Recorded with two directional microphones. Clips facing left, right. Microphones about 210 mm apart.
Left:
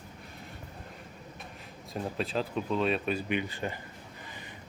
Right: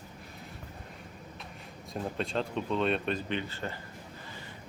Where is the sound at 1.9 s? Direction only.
Centre (ahead or behind).